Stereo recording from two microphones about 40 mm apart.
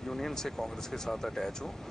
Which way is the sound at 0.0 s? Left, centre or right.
Centre.